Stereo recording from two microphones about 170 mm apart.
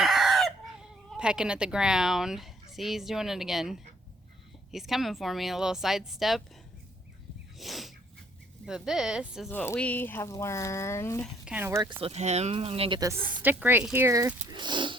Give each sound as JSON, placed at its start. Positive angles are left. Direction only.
{"t": 0.0, "sound": "chicken", "side_deg": 0}
{"t": 2.7, "sound": "speech", "side_deg": 0}
{"t": 7.6, "sound": "a sound", "side_deg": 0}
{"t": 8.6, "sound": "speech", "side_deg": -5}
{"t": 9.5, "sound": "speech", "side_deg": 10}
{"t": 11.4, "sound": "a woman's voice", "side_deg": -10}
{"t": 11.8, "sound": "speech", "side_deg": -30}
{"t": 13.0, "sound": "a woman's voice", "side_deg": -15}
{"t": 14.5, "sound": "speech", "side_deg": -25}